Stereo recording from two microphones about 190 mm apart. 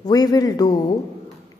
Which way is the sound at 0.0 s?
20° left (ahead or behind).